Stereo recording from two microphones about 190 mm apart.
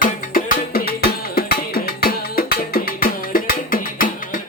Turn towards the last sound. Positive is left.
turn(degrees=45)  # may be behind; listen again after turning